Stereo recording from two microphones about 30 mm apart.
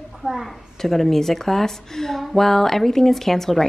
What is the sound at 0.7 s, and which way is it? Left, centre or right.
Speech, centre.